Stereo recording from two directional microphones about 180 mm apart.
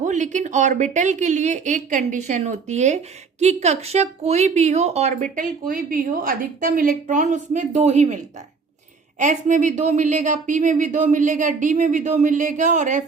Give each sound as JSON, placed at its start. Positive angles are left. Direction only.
{"t": 0.0, "sound": "a man's voice", "side_deg": -45}